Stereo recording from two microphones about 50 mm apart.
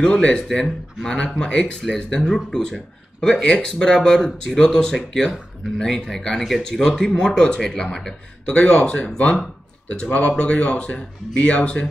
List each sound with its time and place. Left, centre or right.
0.0 s speech: centre
2.2 s speech: centre
8.5 s speech: left